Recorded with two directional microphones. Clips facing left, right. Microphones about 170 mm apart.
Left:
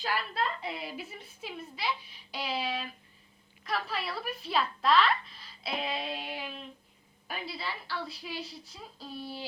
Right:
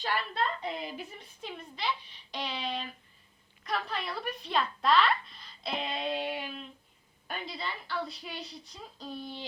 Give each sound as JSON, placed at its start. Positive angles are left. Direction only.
{"t": 0.0, "sound": "a woman's voice", "side_deg": 5}